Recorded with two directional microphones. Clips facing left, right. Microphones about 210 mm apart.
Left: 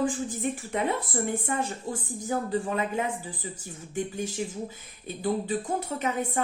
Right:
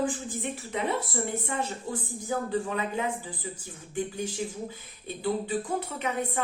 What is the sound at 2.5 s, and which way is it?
Speech, 40° left (ahead or behind).